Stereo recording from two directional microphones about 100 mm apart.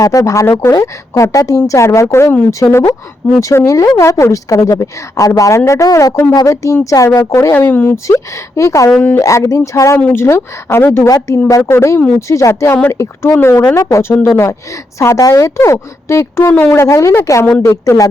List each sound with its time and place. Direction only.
0.0 s a woman's voice: 35° left (ahead or behind)
8.9 s speech: 10° left (ahead or behind)
9.1 s a woman's voice: 30° left (ahead or behind)